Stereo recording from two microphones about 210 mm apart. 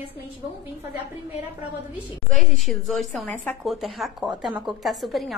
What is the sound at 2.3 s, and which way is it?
A woman's voice, centre (ahead or behind).